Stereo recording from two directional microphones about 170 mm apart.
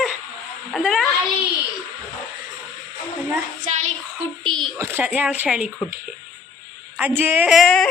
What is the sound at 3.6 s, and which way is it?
Child singing, 45° right (ahead or behind).